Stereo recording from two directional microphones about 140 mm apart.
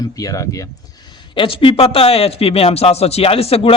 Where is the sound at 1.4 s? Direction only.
40° left (ahead or behind).